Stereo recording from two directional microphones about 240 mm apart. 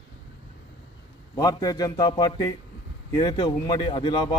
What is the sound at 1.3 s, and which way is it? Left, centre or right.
A man's voice, centre.